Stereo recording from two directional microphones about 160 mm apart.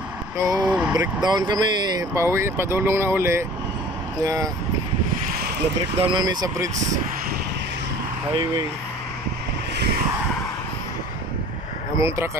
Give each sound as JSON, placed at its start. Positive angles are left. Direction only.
{"t": 0.4, "sound": "speech", "side_deg": -20}
{"t": 0.7, "sound": "speech", "side_deg": -5}
{"t": 1.2, "sound": "speech", "side_deg": -25}
{"t": 5.9, "sound": "speech", "side_deg": -30}